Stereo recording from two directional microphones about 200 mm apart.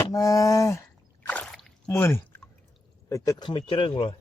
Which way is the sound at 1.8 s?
10° left (ahead or behind).